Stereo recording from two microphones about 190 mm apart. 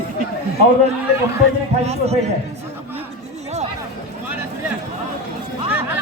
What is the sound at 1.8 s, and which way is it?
Speech, 35° right (ahead or behind).